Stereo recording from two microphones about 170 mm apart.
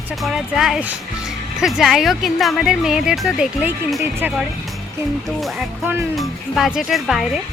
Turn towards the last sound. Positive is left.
turn(degrees=0)  # may be behind; listen again after turning